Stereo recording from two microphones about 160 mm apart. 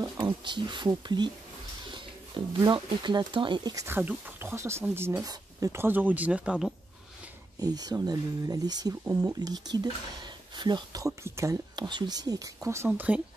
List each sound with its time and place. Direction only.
0.0 s speech: 30° right (ahead or behind)
2.3 s speech: 30° right (ahead or behind)
3.8 s speech: 10° right (ahead or behind)
7.6 s speech: 25° right (ahead or behind)